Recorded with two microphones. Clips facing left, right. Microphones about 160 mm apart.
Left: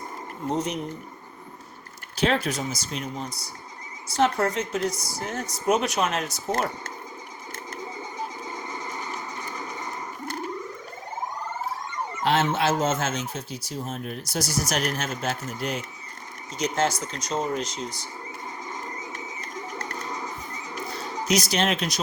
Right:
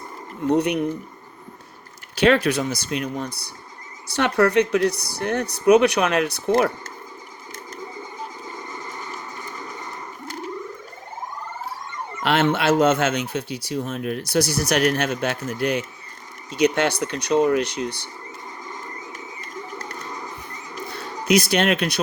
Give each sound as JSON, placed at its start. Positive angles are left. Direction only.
{"t": 0.4, "sound": "speech", "side_deg": -65}
{"t": 2.1, "sound": "speech", "side_deg": -70}
{"t": 12.2, "sound": "speech", "side_deg": -65}
{"t": 21.2, "sound": "speech", "side_deg": -60}